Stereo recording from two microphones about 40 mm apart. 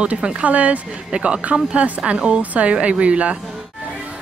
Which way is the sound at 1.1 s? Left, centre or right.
Right.